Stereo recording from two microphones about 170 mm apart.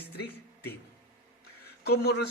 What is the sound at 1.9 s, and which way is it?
Speech, 75° left (ahead or behind).